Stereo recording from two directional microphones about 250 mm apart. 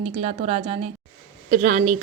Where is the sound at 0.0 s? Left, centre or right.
Right.